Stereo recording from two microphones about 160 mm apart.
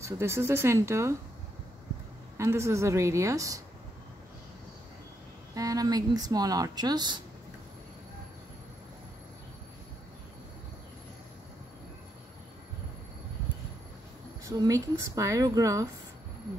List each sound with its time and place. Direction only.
0.0 s speech: 15° right (ahead or behind)
2.3 s speech: 15° right (ahead or behind)
5.5 s speech: 20° right (ahead or behind)
14.4 s speech: 20° right (ahead or behind)